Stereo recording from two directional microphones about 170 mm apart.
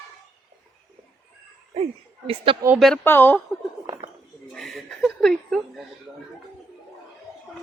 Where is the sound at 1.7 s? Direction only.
35° right (ahead or behind).